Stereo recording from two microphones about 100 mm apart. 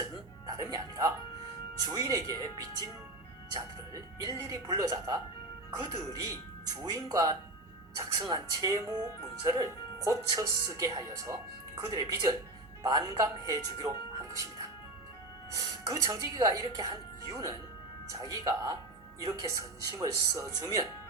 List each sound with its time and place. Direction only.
0.0 s music: 40° right (ahead or behind)
1.9 s speech: 40° right (ahead or behind)
3.5 s speech: 40° right (ahead or behind)
15.5 s speech: 35° right (ahead or behind)